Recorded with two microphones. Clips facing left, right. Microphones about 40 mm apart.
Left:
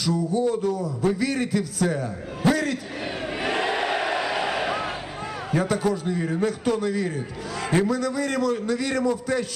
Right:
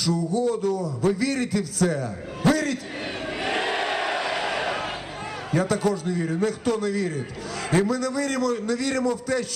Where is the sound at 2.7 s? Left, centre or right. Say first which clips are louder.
Even; left.